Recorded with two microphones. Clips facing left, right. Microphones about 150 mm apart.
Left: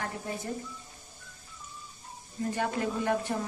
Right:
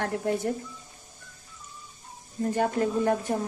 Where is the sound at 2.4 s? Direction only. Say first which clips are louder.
Right 5 dB; 40° right (ahead or behind).